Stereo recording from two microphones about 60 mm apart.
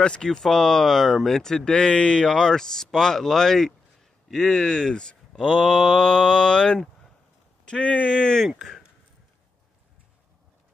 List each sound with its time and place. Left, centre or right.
0.0 s speech: centre
8.5 s speech: centre